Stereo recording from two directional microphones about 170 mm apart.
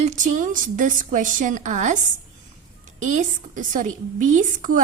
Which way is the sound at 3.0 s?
45° right (ahead or behind).